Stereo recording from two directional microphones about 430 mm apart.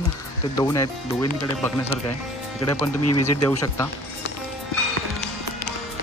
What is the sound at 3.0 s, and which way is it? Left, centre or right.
Speech, left.